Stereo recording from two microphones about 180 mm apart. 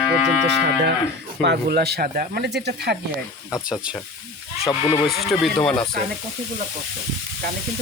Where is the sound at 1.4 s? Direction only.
65° right (ahead or behind).